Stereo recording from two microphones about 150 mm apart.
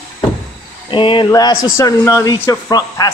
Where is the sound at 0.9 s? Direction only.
35° left (ahead or behind).